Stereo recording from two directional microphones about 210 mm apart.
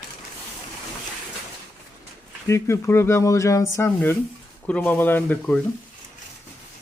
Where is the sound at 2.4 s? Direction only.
15° left (ahead or behind).